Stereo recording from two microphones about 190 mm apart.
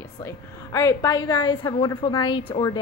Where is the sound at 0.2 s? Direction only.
15° left (ahead or behind).